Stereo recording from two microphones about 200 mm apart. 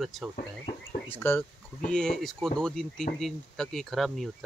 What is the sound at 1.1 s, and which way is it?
Speech, 10° left (ahead or behind).